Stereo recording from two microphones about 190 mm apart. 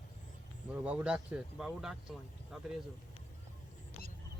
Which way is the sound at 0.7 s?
5° right (ahead or behind).